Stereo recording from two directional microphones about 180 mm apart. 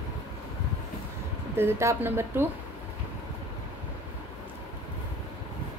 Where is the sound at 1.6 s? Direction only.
15° right (ahead or behind).